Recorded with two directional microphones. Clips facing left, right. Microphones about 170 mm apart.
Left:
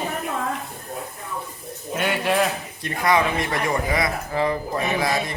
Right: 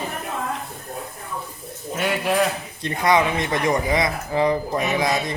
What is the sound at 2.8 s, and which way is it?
Speech, 20° right (ahead or behind).